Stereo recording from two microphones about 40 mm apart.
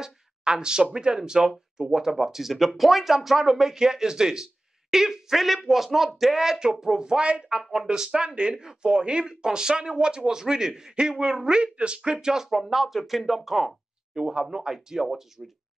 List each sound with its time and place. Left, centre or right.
0.0 s a sound: centre
0.9 s speech: right
12.4 s speech: centre